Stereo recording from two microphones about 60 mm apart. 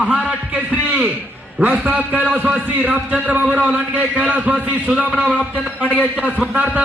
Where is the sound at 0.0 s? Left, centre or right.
Centre.